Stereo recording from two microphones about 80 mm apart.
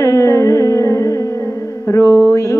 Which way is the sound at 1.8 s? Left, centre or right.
Left.